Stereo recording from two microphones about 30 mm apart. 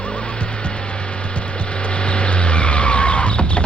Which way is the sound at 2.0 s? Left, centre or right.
Left.